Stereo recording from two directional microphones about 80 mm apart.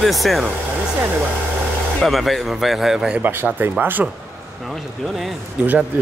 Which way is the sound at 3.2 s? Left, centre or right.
Right.